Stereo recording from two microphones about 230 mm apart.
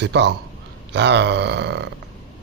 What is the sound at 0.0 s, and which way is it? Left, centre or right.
Speech, right.